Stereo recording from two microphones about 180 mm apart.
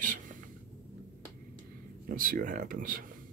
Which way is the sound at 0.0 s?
50° right (ahead or behind).